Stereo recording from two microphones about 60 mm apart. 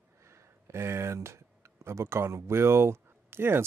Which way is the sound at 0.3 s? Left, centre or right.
Right.